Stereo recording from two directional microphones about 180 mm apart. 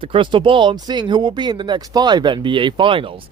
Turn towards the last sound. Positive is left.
turn(degrees=-30)  # may be behind; listen again after turning